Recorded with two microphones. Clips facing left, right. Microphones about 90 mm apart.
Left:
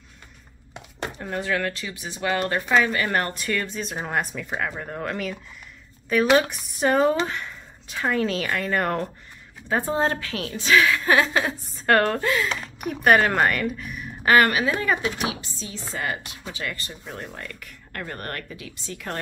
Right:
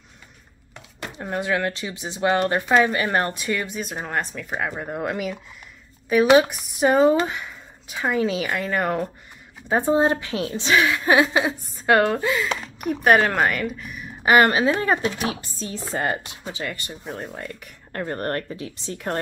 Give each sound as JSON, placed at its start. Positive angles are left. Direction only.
{"t": 1.1, "sound": "speech", "side_deg": -20}
{"t": 3.8, "sound": "speech", "side_deg": 0}
{"t": 4.5, "sound": "speech", "side_deg": -10}
{"t": 9.7, "sound": "speech", "side_deg": -20}
{"t": 14.2, "sound": "speech", "side_deg": -20}
{"t": 15.2, "sound": "speech", "side_deg": -40}
{"t": 16.5, "sound": "speech", "side_deg": -20}